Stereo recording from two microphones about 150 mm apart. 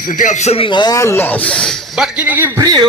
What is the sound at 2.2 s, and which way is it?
Speech, 15° right (ahead or behind).